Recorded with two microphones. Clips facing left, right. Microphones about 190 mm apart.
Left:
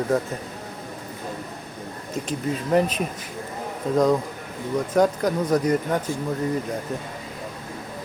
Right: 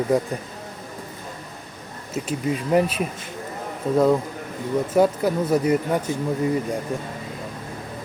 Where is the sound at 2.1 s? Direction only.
10° right (ahead or behind).